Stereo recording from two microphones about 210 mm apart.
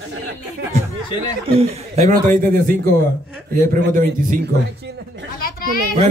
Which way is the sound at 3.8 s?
40° right (ahead or behind).